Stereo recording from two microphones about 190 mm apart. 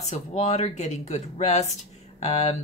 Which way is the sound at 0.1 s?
35° left (ahead or behind).